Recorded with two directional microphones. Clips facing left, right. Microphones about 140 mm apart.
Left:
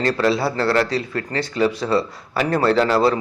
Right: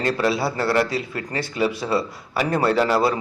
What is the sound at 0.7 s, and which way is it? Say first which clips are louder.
A man's voice: left 2 dB; 15° right (ahead or behind).